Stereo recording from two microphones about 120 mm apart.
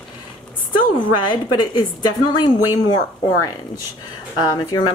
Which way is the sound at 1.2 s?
35° left (ahead or behind).